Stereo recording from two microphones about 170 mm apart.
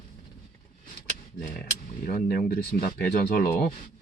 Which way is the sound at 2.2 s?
60° left (ahead or behind).